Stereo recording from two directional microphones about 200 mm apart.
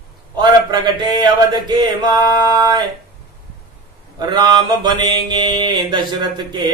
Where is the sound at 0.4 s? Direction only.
20° right (ahead or behind).